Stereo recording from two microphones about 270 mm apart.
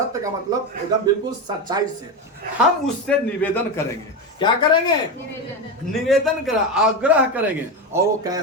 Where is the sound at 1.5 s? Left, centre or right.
Centre.